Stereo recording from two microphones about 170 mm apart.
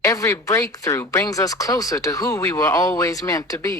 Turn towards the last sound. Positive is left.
turn(degrees=20)  # may be behind; listen again after turning